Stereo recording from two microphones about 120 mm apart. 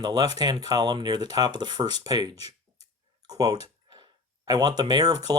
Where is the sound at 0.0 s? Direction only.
35° right (ahead or behind).